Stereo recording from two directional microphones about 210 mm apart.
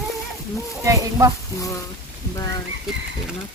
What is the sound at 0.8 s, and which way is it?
Speech, 15° right (ahead or behind).